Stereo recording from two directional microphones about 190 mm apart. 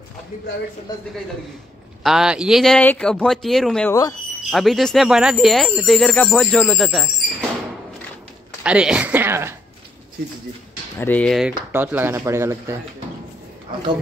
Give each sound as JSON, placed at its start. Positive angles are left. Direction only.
{"t": 2.0, "sound": "speech", "side_deg": -5}
{"t": 8.6, "sound": "speech", "side_deg": -5}
{"t": 11.0, "sound": "speech", "side_deg": 10}